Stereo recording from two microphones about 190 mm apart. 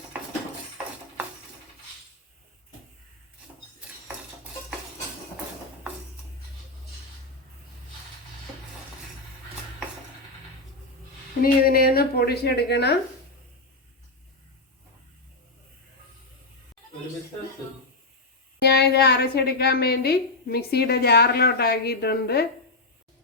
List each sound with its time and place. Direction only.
11.6 s a woman's voice: 50° left (ahead or behind)
18.6 s a woman's voice: 60° left (ahead or behind)